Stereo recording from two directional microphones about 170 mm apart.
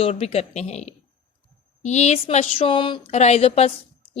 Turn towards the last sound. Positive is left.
turn(degrees=35)  # may be behind; listen again after turning